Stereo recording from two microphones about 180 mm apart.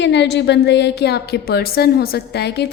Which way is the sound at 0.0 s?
75° left (ahead or behind).